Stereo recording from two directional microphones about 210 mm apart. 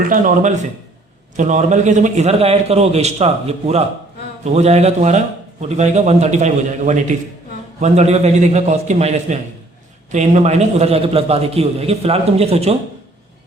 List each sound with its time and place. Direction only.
0.0 s a man's voice: 40° right (ahead or behind)